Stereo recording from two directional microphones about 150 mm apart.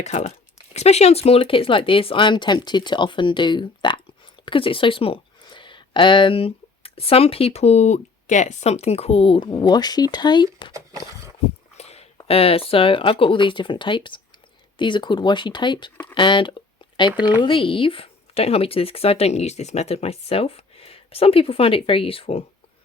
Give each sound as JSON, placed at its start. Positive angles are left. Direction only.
{"t": 0.0, "sound": "speech", "side_deg": 50}
{"t": 11.8, "sound": "a sound", "side_deg": 45}
{"t": 12.3, "sound": "speech", "side_deg": 40}